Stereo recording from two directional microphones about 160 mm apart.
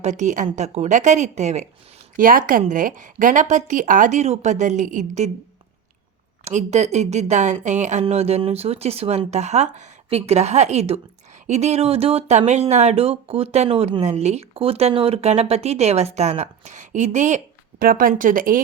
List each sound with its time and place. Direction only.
0.0 s speech: 50° right (ahead or behind)
2.1 s a woman's voice: 60° right (ahead or behind)
6.4 s speech: 45° right (ahead or behind)